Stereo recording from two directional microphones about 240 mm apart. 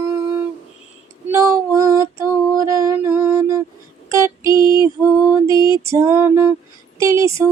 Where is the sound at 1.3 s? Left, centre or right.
Centre.